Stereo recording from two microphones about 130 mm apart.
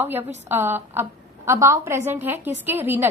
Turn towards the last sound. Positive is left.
turn(degrees=-15)  # may be behind; listen again after turning